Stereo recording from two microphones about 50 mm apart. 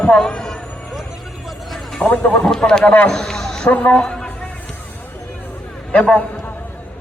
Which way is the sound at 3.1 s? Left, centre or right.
Centre.